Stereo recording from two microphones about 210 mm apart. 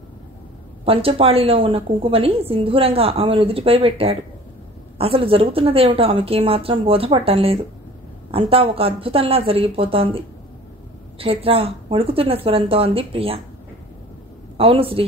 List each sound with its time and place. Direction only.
0.8 s a woman's voice: 25° right (ahead or behind)
11.1 s a woman's voice: 25° right (ahead or behind)
14.6 s a woman's voice: 25° right (ahead or behind)